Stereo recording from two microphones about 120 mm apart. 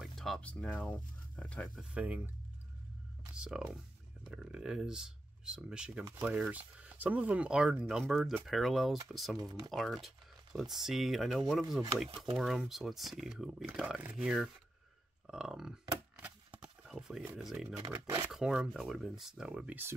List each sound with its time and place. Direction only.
0.0 s speech: centre (ahead or behind)
1.8 s speech: 10° right (ahead or behind)
3.3 s speech: 5° right (ahead or behind)
9.4 s speech: 30° right (ahead or behind)
9.7 s speech: centre (ahead or behind)
15.2 s a sound: 5° right (ahead or behind)
17.4 s speech: 5° right (ahead or behind)
17.6 s speech: 25° right (ahead or behind)
18.3 s speech: 5° right (ahead or behind)